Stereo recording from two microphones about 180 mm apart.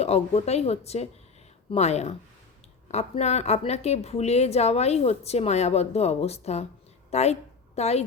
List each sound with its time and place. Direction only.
0.0 s a woman's voice: 35° left (ahead or behind)